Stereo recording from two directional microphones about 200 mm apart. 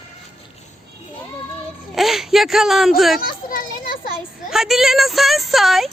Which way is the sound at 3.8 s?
45° left (ahead or behind).